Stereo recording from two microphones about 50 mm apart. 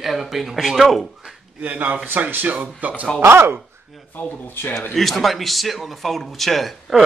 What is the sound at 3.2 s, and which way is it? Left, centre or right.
Speech, right.